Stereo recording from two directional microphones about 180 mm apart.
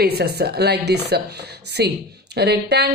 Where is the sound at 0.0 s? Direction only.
60° right (ahead or behind).